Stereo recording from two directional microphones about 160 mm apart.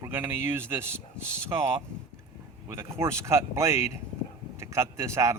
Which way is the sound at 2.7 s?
15° right (ahead or behind).